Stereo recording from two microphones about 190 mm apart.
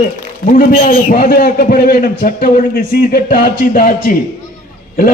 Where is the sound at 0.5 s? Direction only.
50° left (ahead or behind).